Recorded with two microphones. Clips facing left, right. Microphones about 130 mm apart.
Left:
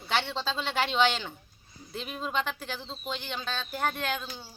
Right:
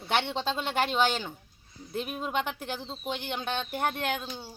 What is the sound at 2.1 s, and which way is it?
Speech, 10° right (ahead or behind).